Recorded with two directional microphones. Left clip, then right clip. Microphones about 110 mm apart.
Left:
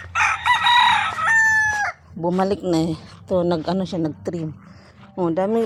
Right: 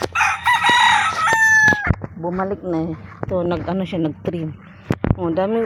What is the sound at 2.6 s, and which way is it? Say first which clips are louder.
Speech: left 2 dB; 90° left.